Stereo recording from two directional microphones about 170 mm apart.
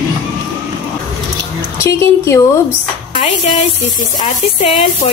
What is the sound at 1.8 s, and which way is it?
Speech, 15° left (ahead or behind).